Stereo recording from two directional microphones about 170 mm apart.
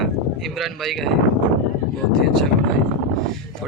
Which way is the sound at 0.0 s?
Centre (ahead or behind).